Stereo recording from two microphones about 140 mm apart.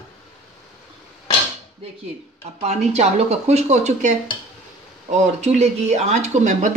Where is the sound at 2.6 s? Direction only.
50° right (ahead or behind).